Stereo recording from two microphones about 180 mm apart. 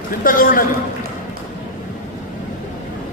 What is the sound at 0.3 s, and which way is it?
Speech, 50° left (ahead or behind).